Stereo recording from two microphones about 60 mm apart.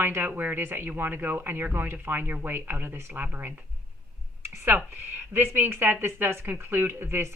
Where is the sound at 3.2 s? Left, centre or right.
Right.